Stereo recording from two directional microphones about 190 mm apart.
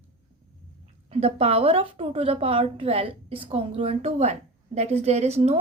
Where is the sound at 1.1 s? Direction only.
30° right (ahead or behind).